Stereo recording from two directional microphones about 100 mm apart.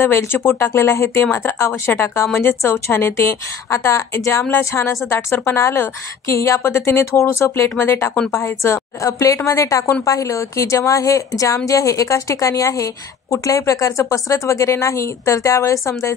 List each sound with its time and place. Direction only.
0.0 s a woman's voice: 25° left (ahead or behind)